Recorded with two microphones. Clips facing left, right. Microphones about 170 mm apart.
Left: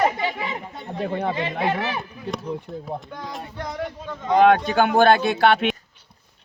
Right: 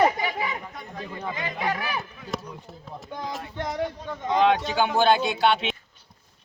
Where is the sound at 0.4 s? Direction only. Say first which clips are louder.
Left 1 dB; 25° left (ahead or behind).